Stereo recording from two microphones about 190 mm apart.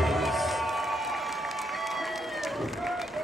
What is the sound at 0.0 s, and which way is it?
Crowd, centre (ahead or behind).